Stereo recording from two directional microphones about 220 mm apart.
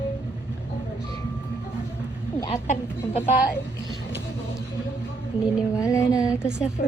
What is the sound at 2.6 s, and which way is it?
Speech, 30° left (ahead or behind).